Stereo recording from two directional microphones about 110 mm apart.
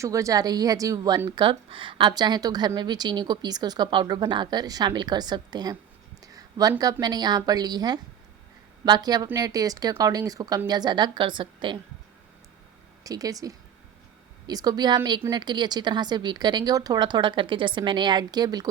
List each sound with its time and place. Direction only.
0.0 s a woman's voice: 30° right (ahead or behind)
1.4 s a woman's voice: 50° right (ahead or behind)
6.2 s a sound: 35° right (ahead or behind)
7.0 s a woman's voice: 40° right (ahead or behind)
13.1 s a woman's voice: 35° right (ahead or behind)